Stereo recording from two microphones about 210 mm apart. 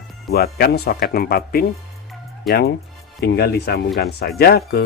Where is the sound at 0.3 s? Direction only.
45° left (ahead or behind).